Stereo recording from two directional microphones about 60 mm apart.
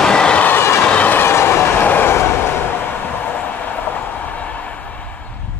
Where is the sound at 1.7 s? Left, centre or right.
Left.